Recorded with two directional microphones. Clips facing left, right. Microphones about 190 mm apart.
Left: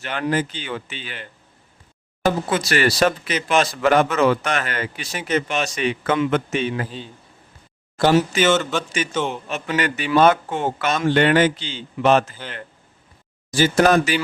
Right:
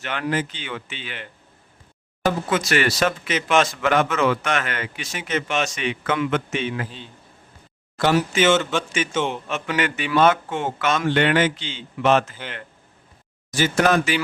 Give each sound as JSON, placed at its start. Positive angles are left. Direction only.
{"t": 0.0, "sound": "speech", "side_deg": 35}
{"t": 2.5, "sound": "speech", "side_deg": 35}
{"t": 8.4, "sound": "speech", "side_deg": 0}
{"t": 9.5, "sound": "speech", "side_deg": 40}
{"t": 13.5, "sound": "speech", "side_deg": 35}